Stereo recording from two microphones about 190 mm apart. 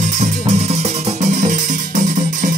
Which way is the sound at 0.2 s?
35° right (ahead or behind).